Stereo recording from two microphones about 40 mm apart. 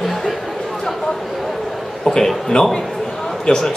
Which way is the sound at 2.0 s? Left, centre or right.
Centre.